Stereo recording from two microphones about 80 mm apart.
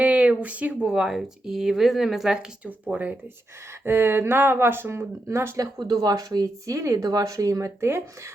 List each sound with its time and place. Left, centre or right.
0.0 s speech: centre
2.6 s speech: right
5.8 s speech: right
6.9 s speech: right